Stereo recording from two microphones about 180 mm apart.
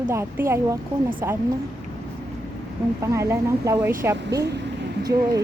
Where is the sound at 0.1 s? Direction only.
15° right (ahead or behind).